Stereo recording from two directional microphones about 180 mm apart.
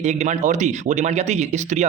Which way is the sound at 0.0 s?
40° right (ahead or behind).